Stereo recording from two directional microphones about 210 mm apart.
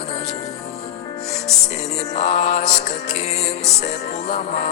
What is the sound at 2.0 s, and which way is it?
Music, 30° left (ahead or behind).